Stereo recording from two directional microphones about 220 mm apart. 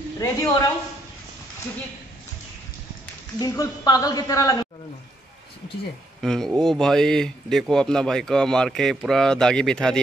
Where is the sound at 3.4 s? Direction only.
15° left (ahead or behind).